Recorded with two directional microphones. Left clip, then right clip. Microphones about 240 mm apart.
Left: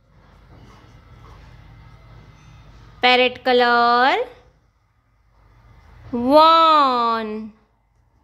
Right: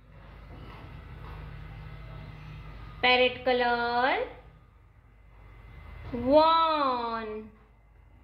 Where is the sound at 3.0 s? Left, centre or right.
Left.